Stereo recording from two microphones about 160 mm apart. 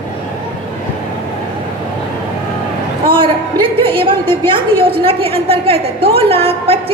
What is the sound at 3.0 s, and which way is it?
A woman's voice, 30° right (ahead or behind).